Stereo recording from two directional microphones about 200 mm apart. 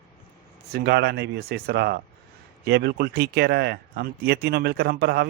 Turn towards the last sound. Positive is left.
turn(degrees=-55)  # may be behind; listen again after turning